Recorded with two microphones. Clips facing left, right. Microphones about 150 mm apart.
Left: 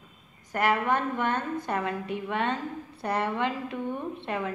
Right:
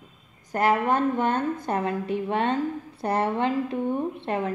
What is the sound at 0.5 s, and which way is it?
A woman's voice, 35° right (ahead or behind).